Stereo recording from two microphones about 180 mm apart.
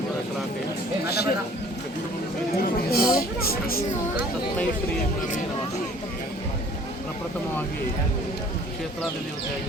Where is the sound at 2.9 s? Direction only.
55° left (ahead or behind).